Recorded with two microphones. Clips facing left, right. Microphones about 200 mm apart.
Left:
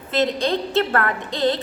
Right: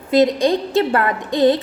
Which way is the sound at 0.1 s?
15° right (ahead or behind).